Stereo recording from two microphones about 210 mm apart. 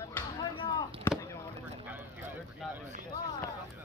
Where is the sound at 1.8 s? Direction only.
10° right (ahead or behind).